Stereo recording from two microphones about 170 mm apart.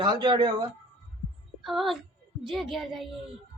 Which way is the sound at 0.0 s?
25° right (ahead or behind).